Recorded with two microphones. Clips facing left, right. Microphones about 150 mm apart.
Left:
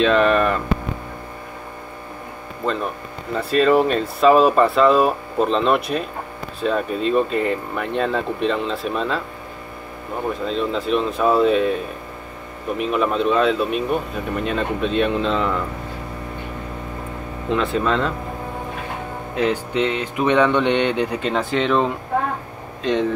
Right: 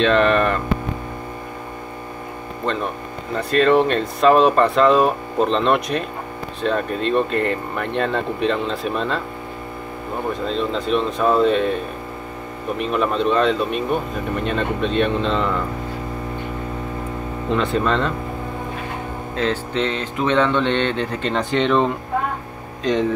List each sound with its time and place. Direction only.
0.0 s speech: 5° left (ahead or behind)
2.6 s speech: 5° left (ahead or behind)
10.4 s speech: centre (ahead or behind)
17.5 s speech: centre (ahead or behind)
19.3 s speech: 15° left (ahead or behind)